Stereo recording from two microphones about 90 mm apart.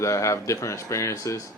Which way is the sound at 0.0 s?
35° left (ahead or behind).